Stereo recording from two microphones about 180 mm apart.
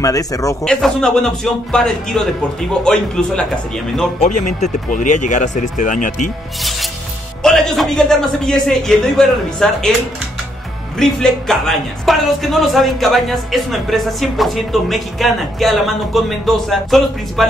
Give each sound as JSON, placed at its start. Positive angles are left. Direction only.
{"t": 0.0, "sound": "speech", "side_deg": 20}
{"t": 0.7, "sound": "speech", "side_deg": 5}
{"t": 4.2, "sound": "speech", "side_deg": 40}
{"t": 7.4, "sound": "speech", "side_deg": 0}
{"t": 11.0, "sound": "speech", "side_deg": 0}